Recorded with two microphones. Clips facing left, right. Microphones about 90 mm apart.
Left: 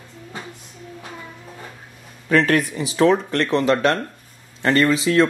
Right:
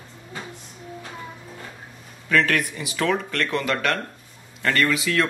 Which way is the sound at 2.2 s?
35° left (ahead or behind).